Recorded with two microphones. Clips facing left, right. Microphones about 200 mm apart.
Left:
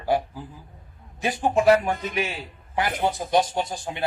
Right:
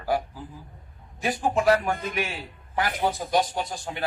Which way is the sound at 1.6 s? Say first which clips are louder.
Left 4 dB; 25° left (ahead or behind).